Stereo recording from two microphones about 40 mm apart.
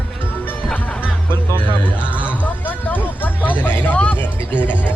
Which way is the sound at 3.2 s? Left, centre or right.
Left.